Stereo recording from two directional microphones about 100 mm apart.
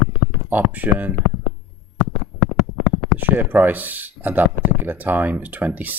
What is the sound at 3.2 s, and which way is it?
Speech, 20° right (ahead or behind).